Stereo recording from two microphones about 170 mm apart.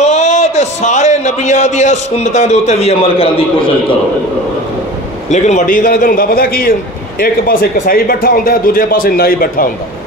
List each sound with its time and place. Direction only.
0.0 s a man's voice: 40° left (ahead or behind)
5.3 s speech: 50° left (ahead or behind)